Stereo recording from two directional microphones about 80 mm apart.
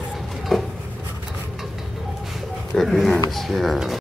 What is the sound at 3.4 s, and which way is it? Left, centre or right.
Speech, centre.